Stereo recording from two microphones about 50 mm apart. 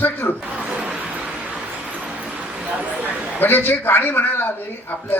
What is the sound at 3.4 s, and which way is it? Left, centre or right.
A man's voice, left.